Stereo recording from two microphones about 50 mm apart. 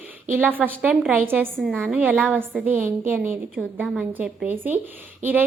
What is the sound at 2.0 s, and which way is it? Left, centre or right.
Speech, right.